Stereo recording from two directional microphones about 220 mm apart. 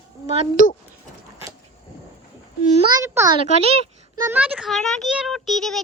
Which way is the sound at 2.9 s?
15° right (ahead or behind).